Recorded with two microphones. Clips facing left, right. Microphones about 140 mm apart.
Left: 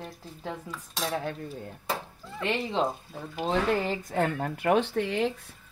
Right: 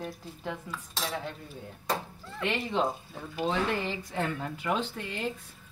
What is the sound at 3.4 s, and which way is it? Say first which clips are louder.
Speech: left 3 dB; 40° left (ahead or behind).